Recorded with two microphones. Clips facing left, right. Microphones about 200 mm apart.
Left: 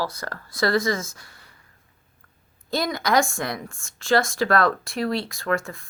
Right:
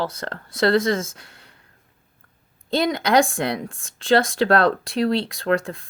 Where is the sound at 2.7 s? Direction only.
30° right (ahead or behind).